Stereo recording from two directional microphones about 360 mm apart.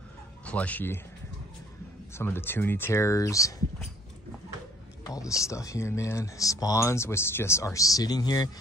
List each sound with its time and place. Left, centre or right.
0.5 s a man's voice: centre
2.1 s speech: centre
5.0 s speech: centre